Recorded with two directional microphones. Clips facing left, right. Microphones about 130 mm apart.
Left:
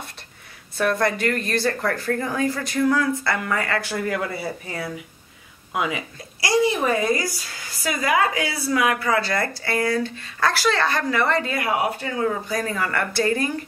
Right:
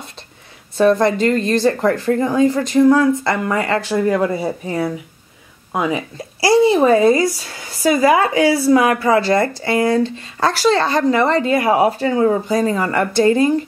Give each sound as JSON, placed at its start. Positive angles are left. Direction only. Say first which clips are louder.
{"t": 0.7, "sound": "speech", "louder": "right 8 dB", "side_deg": -25}